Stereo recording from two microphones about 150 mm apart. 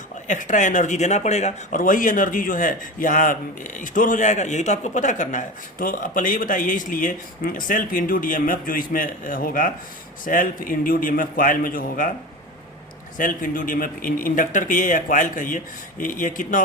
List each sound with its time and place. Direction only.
0.3 s a man's voice: 55° left (ahead or behind)
13.1 s speech: 65° left (ahead or behind)